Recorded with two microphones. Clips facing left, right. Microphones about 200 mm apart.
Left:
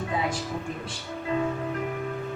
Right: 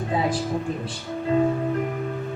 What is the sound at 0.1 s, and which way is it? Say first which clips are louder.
Speech: right 6 dB; 35° right (ahead or behind).